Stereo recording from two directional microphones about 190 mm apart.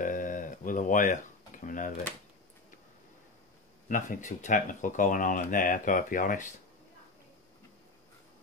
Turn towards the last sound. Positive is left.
turn(degrees=45)  # may be behind; listen again after turning